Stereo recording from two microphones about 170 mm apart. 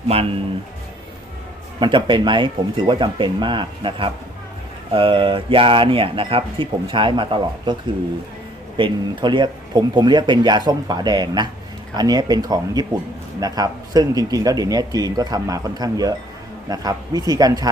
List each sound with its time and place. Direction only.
0.1 s speech: 35° right (ahead or behind)
1.8 s speech: 25° right (ahead or behind)
8.8 s speech: 25° right (ahead or behind)